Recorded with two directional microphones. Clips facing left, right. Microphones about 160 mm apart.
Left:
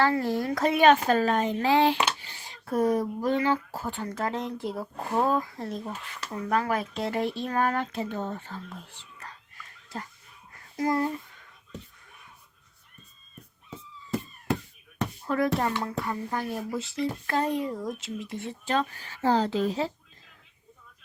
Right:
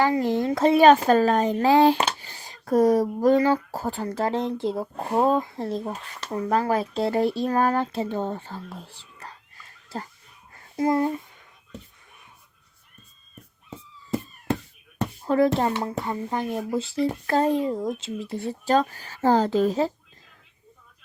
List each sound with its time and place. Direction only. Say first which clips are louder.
0.0 s speech: right 3 dB; 15° right (ahead or behind)
15.2 s speech: right 6 dB; 30° right (ahead or behind); by 19.9 s 45° right (ahead or behind)